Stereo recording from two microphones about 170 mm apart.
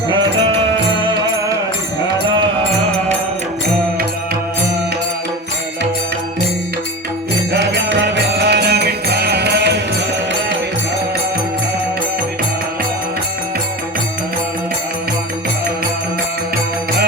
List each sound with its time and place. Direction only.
7.5 s music: 90° right